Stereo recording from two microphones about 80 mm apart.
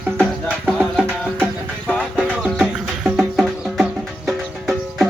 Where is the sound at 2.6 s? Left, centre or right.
Centre.